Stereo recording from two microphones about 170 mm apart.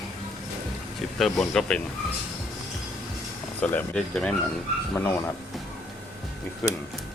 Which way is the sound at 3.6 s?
10° left (ahead or behind).